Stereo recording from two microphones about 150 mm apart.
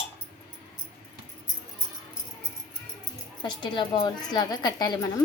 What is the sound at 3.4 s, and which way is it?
A woman's voice, 30° left (ahead or behind).